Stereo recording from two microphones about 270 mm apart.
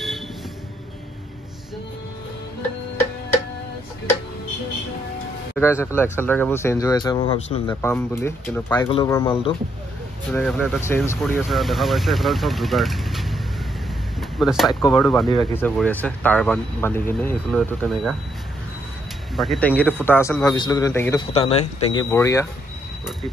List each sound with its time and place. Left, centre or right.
5.6 s a man's voice: centre
7.7 s a man's voice: centre
10.3 s speech: centre
14.4 s speech: centre
15.2 s speech: centre
19.3 s a man's voice: centre
21.3 s speech: left
22.1 s a man's voice: centre